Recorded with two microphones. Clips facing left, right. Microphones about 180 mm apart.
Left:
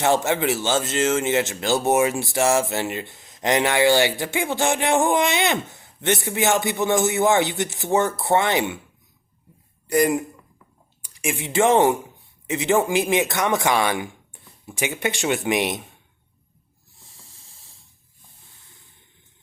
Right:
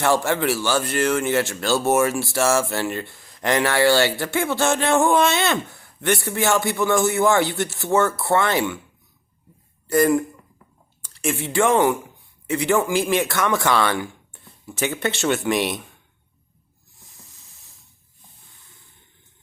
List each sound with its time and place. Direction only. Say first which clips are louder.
0.0 s speech: even; 20° left (ahead or behind)
9.8 s speech: right 2 dB; 15° left (ahead or behind)
17.0 s hiss: right 1 dB; 30° left (ahead or behind)